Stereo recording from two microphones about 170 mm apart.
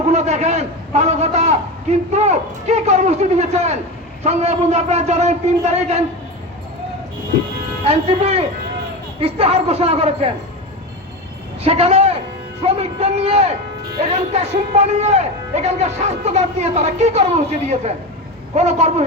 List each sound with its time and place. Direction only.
0.0 s a man's voice: 40° right (ahead or behind)
7.9 s a man's voice: 35° right (ahead or behind)
11.6 s a man's voice: 35° right (ahead or behind)